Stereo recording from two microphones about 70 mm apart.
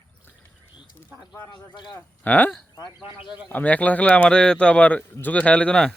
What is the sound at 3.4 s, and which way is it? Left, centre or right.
A man's voice, left.